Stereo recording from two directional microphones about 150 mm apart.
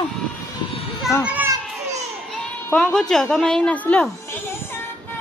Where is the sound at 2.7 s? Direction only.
5° left (ahead or behind).